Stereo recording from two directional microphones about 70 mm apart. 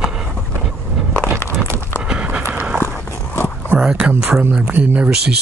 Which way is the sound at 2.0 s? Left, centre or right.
Centre.